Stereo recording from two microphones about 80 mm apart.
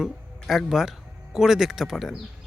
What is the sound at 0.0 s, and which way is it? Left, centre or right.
Speech, centre.